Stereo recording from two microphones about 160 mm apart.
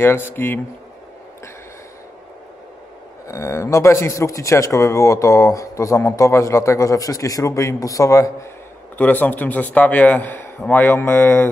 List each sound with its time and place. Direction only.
0.3 s a man's voice: 15° left (ahead or behind)
3.3 s a man's voice: 20° left (ahead or behind)